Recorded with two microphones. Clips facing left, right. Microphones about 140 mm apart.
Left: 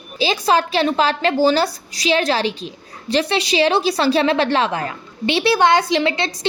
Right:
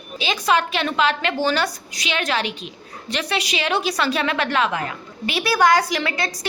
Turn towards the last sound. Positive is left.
turn(degrees=25)  # may be behind; listen again after turning